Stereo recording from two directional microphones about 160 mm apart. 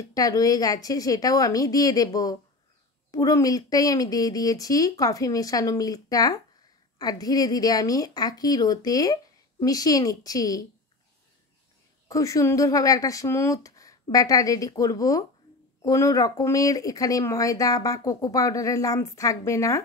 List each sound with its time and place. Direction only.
0.1 s speech: 20° left (ahead or behind)
12.1 s speech: 20° left (ahead or behind)